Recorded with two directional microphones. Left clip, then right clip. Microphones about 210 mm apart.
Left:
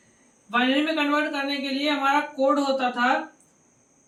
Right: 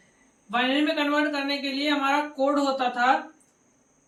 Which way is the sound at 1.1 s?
15° left (ahead or behind).